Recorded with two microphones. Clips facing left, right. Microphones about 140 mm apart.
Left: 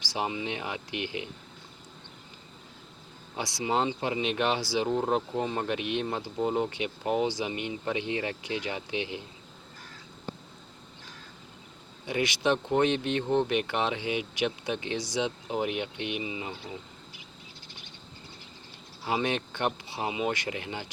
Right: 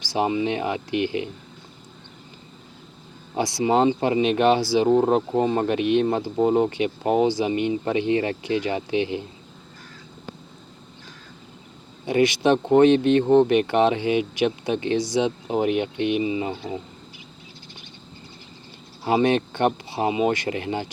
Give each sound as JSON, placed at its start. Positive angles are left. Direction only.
{"t": 0.0, "sound": "a sound", "side_deg": -60}
{"t": 0.3, "sound": "speech", "side_deg": -45}
{"t": 3.3, "sound": "speech", "side_deg": -60}
{"t": 12.0, "sound": "speech", "side_deg": -55}
{"t": 19.0, "sound": "speech", "side_deg": -50}